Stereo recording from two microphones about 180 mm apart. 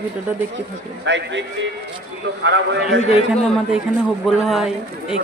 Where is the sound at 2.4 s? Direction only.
90° right.